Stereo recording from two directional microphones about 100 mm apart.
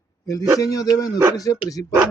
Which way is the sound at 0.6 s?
35° left (ahead or behind).